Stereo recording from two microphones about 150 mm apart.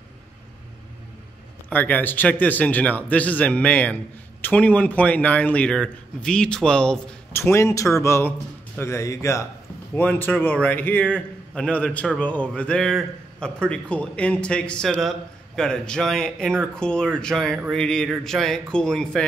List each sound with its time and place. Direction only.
1.7 s a man's voice: 10° left (ahead or behind)
7.3 s a man's voice: 15° left (ahead or behind)